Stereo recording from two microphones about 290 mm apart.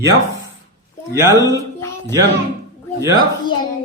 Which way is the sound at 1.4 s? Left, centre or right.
Centre.